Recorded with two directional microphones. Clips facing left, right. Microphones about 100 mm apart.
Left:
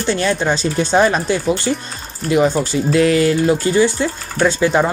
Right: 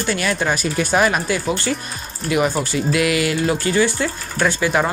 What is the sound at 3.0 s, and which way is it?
Speech, 35° left (ahead or behind).